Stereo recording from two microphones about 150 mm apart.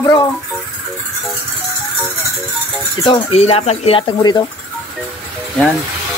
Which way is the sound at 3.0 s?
35° left (ahead or behind).